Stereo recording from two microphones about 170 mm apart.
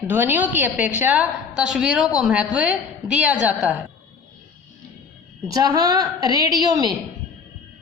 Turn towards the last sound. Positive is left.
turn(degrees=-25)  # may be behind; listen again after turning